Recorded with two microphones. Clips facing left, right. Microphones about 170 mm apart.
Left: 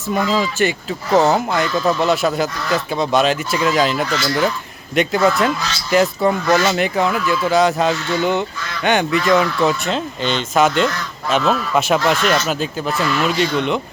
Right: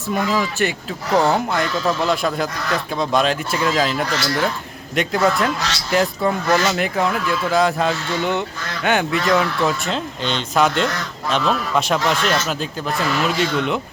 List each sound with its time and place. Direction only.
0.1 s speech: centre (ahead or behind)
5.5 s speech: 75° right (ahead or behind)
5.9 s speech: centre (ahead or behind)